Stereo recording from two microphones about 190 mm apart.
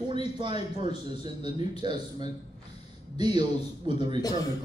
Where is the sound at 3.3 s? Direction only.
25° right (ahead or behind).